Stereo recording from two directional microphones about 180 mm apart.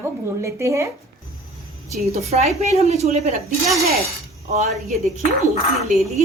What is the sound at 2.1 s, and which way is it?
Speech, 35° right (ahead or behind).